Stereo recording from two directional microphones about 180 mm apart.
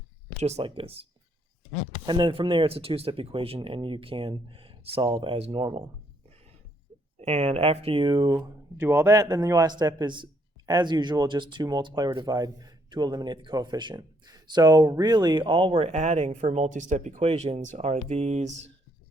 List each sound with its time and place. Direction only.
0.3 s speech: 35° right (ahead or behind)
2.0 s speech: 25° right (ahead or behind)
7.2 s speech: 35° right (ahead or behind)